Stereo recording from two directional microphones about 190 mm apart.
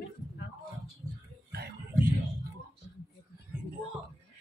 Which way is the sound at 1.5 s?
55° right (ahead or behind).